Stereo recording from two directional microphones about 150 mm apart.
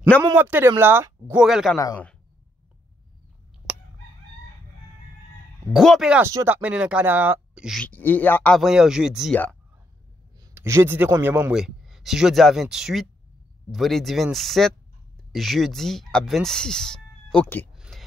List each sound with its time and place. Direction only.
0.2 s speech: 15° right (ahead or behind)
1.3 s speech: 5° right (ahead or behind)
3.7 s crowing: 5° right (ahead or behind)
5.7 s speech: centre (ahead or behind)
6.2 s speech: 15° right (ahead or behind)
7.8 s speech: 10° left (ahead or behind)
8.5 s speech: 5° right (ahead or behind)
9.3 s speech: 10° left (ahead or behind)
10.4 s a man's voice: 20° right (ahead or behind)
11.5 s speech: 5° right (ahead or behind)
17.7 s a sound: centre (ahead or behind)